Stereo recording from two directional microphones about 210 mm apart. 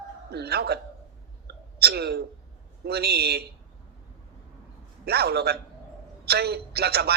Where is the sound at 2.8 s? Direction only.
50° right (ahead or behind).